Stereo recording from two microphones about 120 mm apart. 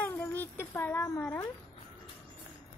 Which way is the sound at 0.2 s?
15° left (ahead or behind).